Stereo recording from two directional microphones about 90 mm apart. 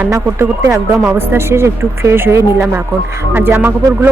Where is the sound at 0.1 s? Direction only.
30° right (ahead or behind).